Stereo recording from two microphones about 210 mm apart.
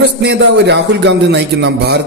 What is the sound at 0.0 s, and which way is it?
A man's voice, 55° right (ahead or behind).